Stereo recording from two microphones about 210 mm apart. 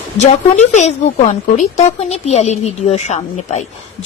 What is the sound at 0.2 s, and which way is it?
A woman's voice, 35° left (ahead or behind).